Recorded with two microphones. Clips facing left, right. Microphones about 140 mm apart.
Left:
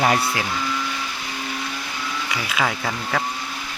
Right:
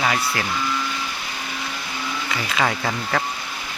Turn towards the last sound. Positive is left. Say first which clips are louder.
# right 1 dB
turn(degrees=0)  # may be behind; listen again after turning